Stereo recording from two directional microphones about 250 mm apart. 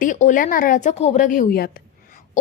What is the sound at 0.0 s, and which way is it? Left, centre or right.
A woman's voice, left.